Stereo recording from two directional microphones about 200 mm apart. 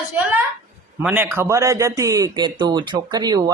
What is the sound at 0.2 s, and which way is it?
A woman's voice, 10° right (ahead or behind).